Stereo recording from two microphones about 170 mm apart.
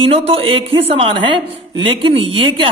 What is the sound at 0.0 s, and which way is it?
A man's voice, 35° right (ahead or behind).